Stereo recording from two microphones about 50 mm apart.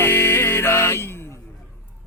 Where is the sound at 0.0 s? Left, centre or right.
Left.